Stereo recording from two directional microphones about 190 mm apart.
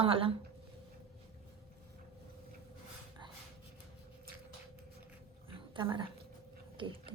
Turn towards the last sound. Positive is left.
turn(degrees=-25)  # may be behind; listen again after turning